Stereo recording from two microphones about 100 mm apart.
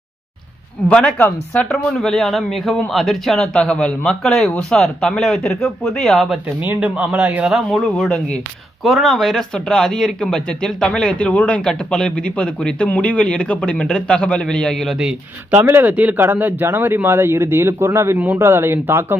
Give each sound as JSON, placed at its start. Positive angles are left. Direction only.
{"t": 0.8, "sound": "speech", "side_deg": 10}
{"t": 1.1, "sound": "speech", "side_deg": 20}
{"t": 1.6, "sound": "speech", "side_deg": 5}
{"t": 6.3, "sound": "speech", "side_deg": -15}
{"t": 7.7, "sound": "speech", "side_deg": 5}
{"t": 15.6, "sound": "a man's voice", "side_deg": -25}